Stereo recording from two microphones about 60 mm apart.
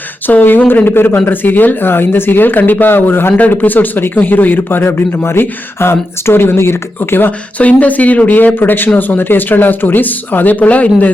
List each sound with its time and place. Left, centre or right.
0.3 s speech: left
7.6 s speech: left